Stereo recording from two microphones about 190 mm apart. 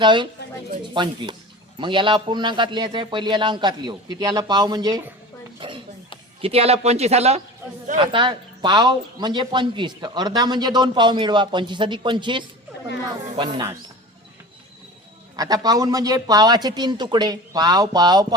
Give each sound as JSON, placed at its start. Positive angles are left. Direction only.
{"t": 0.0, "sound": "speech", "side_deg": -25}
{"t": 5.5, "sound": "a sound", "side_deg": -25}
{"t": 6.4, "sound": "speech", "side_deg": -30}
{"t": 15.4, "sound": "speech", "side_deg": -20}